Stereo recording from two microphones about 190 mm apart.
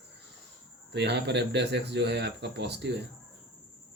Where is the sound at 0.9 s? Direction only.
65° right (ahead or behind).